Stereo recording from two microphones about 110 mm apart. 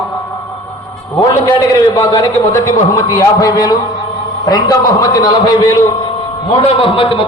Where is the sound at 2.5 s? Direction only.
30° left (ahead or behind).